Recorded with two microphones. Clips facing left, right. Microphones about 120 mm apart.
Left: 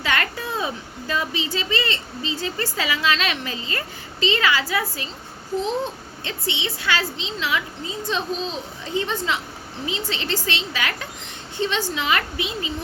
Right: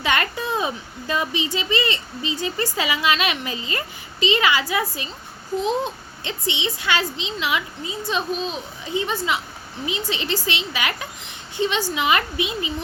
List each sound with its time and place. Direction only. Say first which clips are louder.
0.0 s a child's voice: right 2 dB; 20° right (ahead or behind)